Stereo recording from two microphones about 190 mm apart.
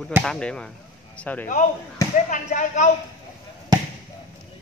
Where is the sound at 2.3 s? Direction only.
40° left (ahead or behind).